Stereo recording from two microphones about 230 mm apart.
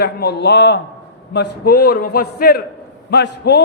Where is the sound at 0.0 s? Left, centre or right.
Left.